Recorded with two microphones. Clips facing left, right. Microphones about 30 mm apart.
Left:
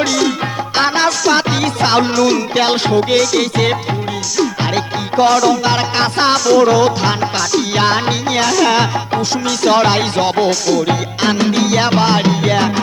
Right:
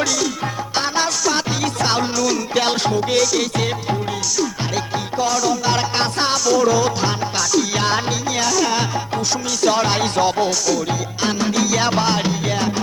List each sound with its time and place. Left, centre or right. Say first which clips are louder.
1.0 s music: left 7 dB; left
3.3 s music: left 6 dB; left
6.7 s music: left 5 dB; left
9.6 s music: left 5 dB; left
10.8 s music: left 6 dB; left
11.4 s music: left 4 dB; left